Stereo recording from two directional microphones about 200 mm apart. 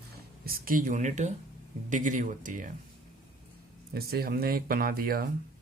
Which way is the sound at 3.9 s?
50° right (ahead or behind).